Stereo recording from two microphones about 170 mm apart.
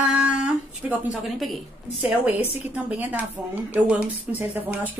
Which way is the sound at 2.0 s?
10° right (ahead or behind).